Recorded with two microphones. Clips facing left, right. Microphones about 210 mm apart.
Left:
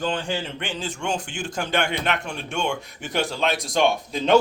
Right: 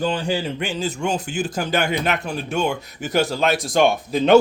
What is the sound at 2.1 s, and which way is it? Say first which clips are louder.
Speech: right 4 dB; 5° right (ahead or behind).